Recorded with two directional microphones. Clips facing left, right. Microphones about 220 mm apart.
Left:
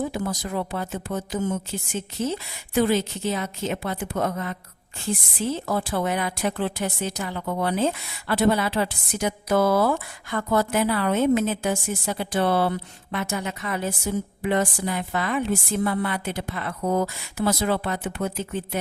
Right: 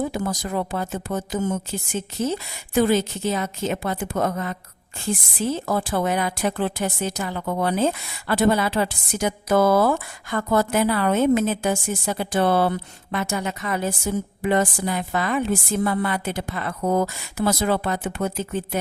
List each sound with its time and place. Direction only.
0.1 s a woman's voice: 45° right (ahead or behind)